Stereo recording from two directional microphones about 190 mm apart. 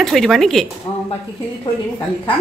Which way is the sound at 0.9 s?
30° left (ahead or behind).